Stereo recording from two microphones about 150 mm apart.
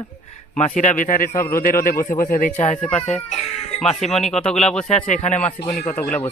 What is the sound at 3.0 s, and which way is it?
Speech, 45° left (ahead or behind).